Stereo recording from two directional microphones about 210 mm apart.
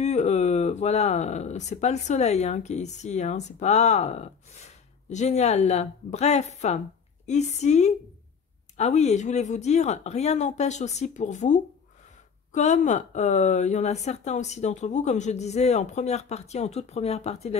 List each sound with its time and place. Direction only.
0.0 s speech: 35° left (ahead or behind)